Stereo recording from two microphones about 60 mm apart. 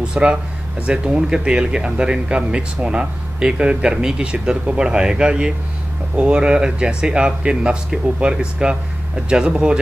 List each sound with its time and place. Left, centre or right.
0.0 s speech: centre